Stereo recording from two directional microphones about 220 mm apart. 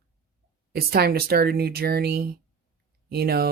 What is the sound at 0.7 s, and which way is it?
Speech, 45° right (ahead or behind).